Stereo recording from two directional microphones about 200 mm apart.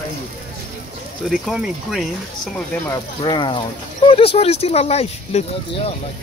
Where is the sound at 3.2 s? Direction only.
25° left (ahead or behind).